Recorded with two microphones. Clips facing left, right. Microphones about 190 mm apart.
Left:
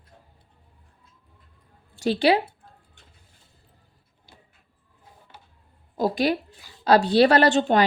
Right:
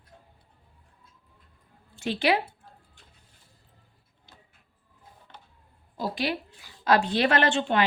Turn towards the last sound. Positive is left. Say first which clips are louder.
# left 6 dB
turn(degrees=40)  # may be behind; listen again after turning